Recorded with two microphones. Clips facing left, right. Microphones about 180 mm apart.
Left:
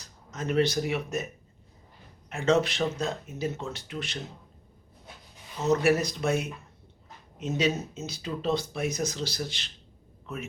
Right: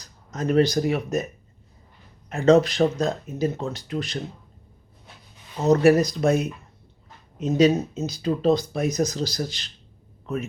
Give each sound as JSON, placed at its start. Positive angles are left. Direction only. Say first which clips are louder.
{"t": 0.0, "sound": "speech", "louder": "right 7 dB", "side_deg": -40}
{"t": 2.3, "sound": "speech", "louder": "right 7 dB", "side_deg": -40}
{"t": 5.7, "sound": "speech", "louder": "right 7 dB", "side_deg": -40}